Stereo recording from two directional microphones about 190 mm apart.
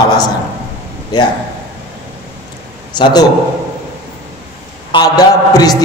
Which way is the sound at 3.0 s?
20° left (ahead or behind).